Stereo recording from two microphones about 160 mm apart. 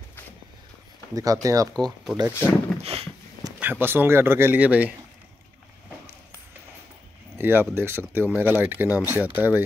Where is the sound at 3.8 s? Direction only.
15° right (ahead or behind).